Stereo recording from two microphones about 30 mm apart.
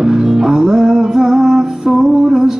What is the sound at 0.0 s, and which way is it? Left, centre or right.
Music, right.